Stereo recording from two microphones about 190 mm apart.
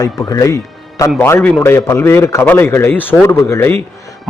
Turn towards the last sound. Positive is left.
turn(degrees=15)  # may be behind; listen again after turning